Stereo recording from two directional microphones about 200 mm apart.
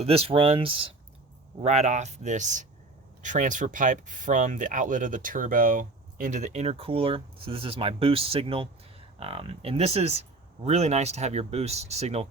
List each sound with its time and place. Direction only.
0.0 s speech: 30° right (ahead or behind)